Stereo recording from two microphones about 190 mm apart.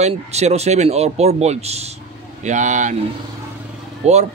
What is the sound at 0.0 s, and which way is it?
A man's voice, 35° right (ahead or behind).